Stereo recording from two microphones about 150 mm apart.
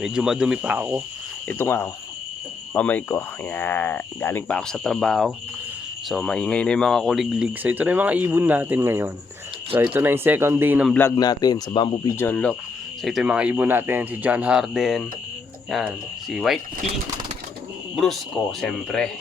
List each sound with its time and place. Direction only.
0.0 s speech: 5° right (ahead or behind)
1.5 s speech: 15° left (ahead or behind); by 10.8 s 15° right (ahead or behind)
11.2 s speech: 25° left (ahead or behind)
12.1 s speech: 15° left (ahead or behind)
13.0 s speech: centre (ahead or behind)
17.9 s speech: centre (ahead or behind)